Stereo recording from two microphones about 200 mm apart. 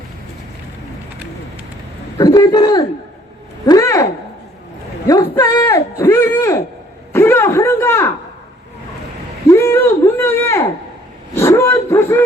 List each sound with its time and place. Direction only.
2.1 s a man's voice: 20° left (ahead or behind)
5.3 s speech: 10° left (ahead or behind)
9.5 s speech: 15° left (ahead or behind)